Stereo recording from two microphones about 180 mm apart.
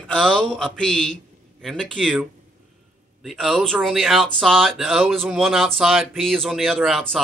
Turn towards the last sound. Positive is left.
turn(degrees=0)  # may be behind; listen again after turning